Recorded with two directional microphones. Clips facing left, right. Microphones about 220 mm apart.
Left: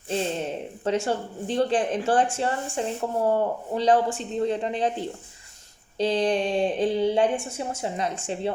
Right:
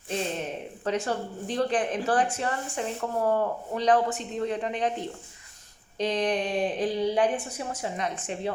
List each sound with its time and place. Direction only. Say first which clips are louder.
0.1 s speech: left 3 dB; 30° left (ahead or behind)